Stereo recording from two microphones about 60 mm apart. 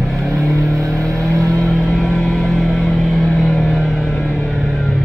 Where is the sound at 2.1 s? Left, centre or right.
Centre.